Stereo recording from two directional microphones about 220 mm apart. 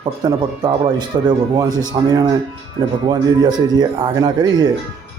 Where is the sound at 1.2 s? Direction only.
20° right (ahead or behind).